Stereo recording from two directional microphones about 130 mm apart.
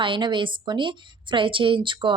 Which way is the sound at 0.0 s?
40° right (ahead or behind).